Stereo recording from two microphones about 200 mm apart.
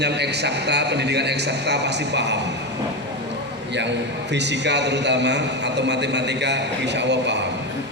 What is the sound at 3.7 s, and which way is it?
A man's voice, 60° right (ahead or behind).